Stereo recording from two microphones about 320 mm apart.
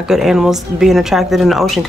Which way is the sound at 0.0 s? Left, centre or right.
Centre.